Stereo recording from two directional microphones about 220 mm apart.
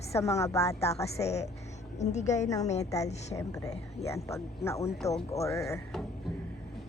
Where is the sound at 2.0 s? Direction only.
30° left (ahead or behind).